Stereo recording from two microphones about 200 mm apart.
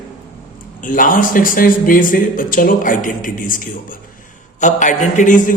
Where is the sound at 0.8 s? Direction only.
40° left (ahead or behind).